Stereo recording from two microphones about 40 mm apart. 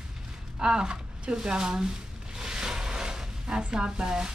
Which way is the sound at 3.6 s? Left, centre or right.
Centre.